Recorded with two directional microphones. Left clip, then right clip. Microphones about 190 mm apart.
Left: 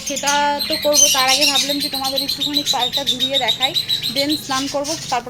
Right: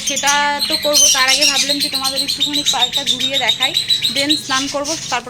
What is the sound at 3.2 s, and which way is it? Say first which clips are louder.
Speech: right 1 dB; centre (ahead or behind).